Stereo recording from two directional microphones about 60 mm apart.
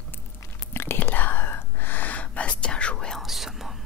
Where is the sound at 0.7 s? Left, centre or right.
Left; by 3.2 s centre.